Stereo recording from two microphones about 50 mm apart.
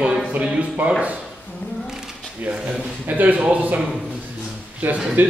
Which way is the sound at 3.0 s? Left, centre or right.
Right.